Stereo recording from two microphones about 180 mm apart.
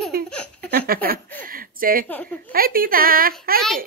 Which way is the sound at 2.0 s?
5° left (ahead or behind).